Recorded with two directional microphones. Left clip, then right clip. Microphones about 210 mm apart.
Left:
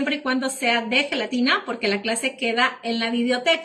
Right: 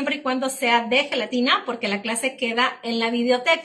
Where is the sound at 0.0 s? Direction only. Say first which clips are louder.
Even; 15° right (ahead or behind).